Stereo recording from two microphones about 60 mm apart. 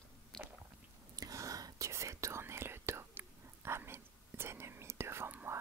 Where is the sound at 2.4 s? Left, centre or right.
Right.